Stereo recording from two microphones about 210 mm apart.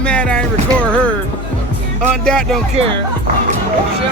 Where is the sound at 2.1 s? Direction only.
5° left (ahead or behind).